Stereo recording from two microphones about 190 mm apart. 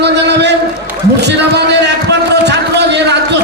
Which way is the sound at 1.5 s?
65° right (ahead or behind).